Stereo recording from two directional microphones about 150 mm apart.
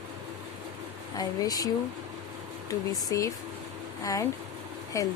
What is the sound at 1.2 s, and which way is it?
Speech, 25° left (ahead or behind).